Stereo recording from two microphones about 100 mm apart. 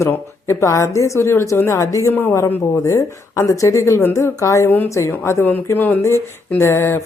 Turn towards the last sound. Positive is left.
turn(degrees=25)  # may be behind; listen again after turning